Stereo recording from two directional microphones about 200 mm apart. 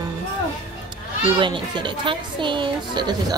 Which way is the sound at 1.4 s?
25° right (ahead or behind).